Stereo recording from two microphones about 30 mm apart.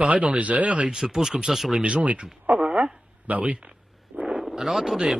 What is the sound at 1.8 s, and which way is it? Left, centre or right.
Speech, right.